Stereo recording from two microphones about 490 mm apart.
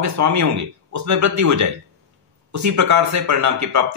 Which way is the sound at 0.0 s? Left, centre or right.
Right.